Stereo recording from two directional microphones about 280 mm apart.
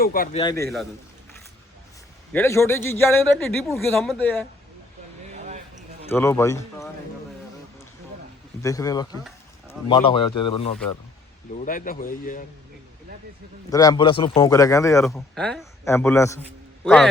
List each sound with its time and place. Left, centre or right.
0.0 s speech: left
0.4 s a man's voice: centre
2.3 s a man's voice: centre
5.3 s a sound: right
6.1 s a man's voice: centre
8.6 s a man's voice: centre; by 12.5 s left
13.7 s a man's voice: centre